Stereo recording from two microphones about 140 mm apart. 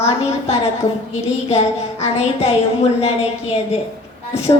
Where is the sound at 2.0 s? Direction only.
45° left (ahead or behind).